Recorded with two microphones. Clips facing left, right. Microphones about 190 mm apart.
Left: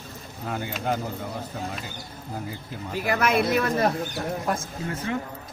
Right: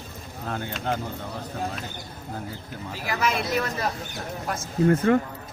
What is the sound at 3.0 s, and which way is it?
Speech, 55° left (ahead or behind).